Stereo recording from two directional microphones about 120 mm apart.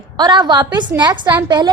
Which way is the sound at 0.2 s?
40° right (ahead or behind).